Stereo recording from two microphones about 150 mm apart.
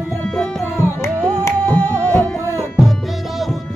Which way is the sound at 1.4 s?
10° left (ahead or behind).